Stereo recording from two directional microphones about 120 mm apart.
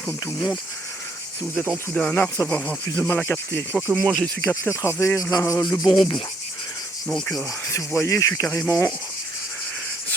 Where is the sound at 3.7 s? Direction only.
5° left (ahead or behind); by 5.8 s 30° left (ahead or behind).